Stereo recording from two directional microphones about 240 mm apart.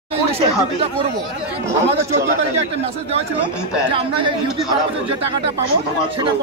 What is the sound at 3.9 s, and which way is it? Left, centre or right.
Speech, right.